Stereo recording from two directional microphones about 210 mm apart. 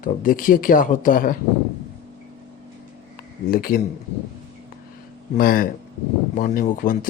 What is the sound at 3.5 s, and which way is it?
Speech, 45° left (ahead or behind).